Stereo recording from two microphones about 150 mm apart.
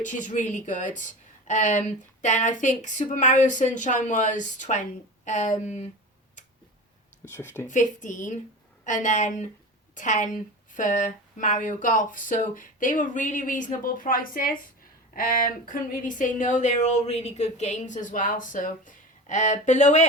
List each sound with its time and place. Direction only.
0.0 s speech: 55° left (ahead or behind)
7.3 s speech: 15° left (ahead or behind)
7.7 s a woman's voice: 55° left (ahead or behind)